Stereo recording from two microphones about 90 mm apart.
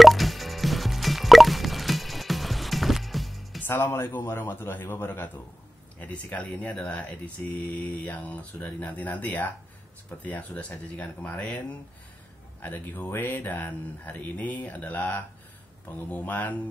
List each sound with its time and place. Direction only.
0.0 s music: centre (ahead or behind)
3.6 s speech: 25° left (ahead or behind)
12.6 s speech: 20° left (ahead or behind)